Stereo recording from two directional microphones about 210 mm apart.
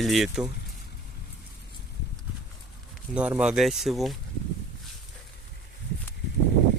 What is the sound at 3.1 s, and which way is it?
Speech, 5° right (ahead or behind).